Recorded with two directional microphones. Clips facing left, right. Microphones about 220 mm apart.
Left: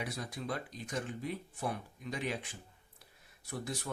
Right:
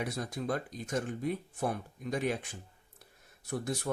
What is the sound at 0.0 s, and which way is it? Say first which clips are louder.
Speech: right 5 dB; 45° right (ahead or behind).